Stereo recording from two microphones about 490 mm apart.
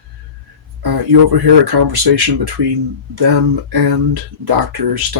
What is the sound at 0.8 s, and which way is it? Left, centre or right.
Speech, right.